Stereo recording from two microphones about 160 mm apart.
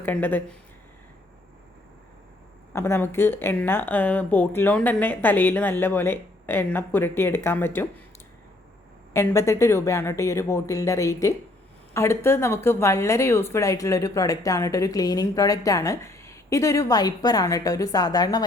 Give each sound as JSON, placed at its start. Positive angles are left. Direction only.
{"t": 0.0, "sound": "speech", "side_deg": 10}
{"t": 2.7, "sound": "speech", "side_deg": 15}
{"t": 9.1, "sound": "speech", "side_deg": 20}